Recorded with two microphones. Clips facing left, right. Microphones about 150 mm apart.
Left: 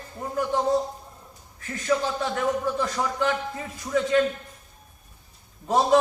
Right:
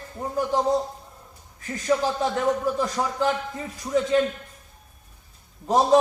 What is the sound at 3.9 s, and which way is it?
Speech, 20° right (ahead or behind).